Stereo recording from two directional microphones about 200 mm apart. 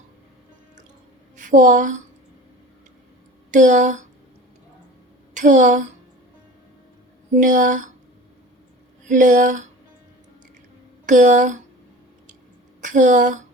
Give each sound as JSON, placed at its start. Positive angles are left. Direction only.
{"t": 1.4, "sound": "a woman's voice", "side_deg": -40}
{"t": 3.5, "sound": "speech", "side_deg": -40}
{"t": 5.3, "sound": "speech", "side_deg": -40}
{"t": 7.3, "sound": "speech", "side_deg": -40}
{"t": 9.0, "sound": "speech", "side_deg": -40}
{"t": 11.0, "sound": "speech", "side_deg": -40}
{"t": 12.8, "sound": "a woman's voice", "side_deg": -40}